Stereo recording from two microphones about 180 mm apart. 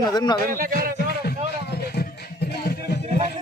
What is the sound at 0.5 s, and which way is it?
Speech, 55° right (ahead or behind).